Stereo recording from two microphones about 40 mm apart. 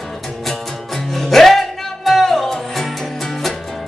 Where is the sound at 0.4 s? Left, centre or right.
Centre.